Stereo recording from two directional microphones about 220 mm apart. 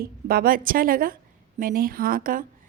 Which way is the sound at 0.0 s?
40° right (ahead or behind).